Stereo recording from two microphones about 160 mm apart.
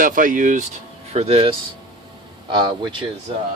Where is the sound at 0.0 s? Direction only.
55° right (ahead or behind).